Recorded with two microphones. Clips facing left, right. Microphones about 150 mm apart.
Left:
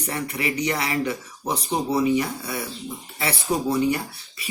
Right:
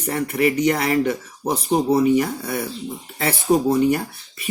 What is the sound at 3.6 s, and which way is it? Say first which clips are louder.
Speech: right 4 dB; 50° right (ahead or behind).